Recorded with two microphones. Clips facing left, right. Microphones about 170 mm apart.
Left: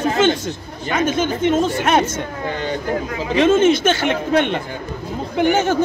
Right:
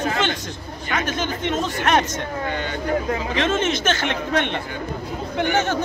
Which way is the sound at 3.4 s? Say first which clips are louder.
Left 10 dB; 10° left (ahead or behind).